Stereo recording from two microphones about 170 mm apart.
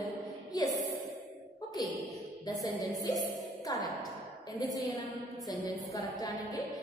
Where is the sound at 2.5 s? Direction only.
25° left (ahead or behind).